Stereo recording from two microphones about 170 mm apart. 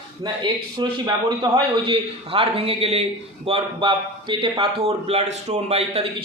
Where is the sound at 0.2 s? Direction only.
25° right (ahead or behind).